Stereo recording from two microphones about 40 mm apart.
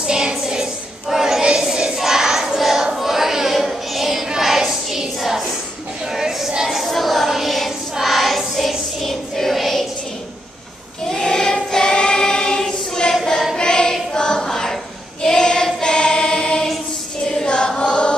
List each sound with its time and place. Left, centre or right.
0.0 s child singing: centre
1.0 s choir: centre
1.4 s a sound: centre
6.7 s child singing: centre
11.1 s choir: centre